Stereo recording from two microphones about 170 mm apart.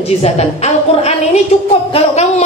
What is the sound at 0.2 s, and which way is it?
A woman's voice, 40° left (ahead or behind).